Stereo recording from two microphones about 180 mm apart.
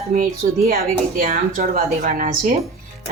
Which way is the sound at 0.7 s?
50° right (ahead or behind).